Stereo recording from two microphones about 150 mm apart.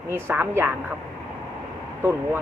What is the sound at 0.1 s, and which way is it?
Speech, 15° right (ahead or behind).